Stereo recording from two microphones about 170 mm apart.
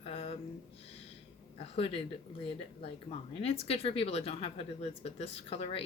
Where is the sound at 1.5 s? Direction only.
35° left (ahead or behind).